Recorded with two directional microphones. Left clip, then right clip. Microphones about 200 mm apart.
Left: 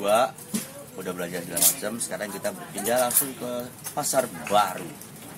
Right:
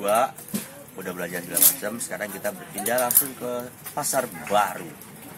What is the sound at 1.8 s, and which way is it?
Speech, 10° left (ahead or behind).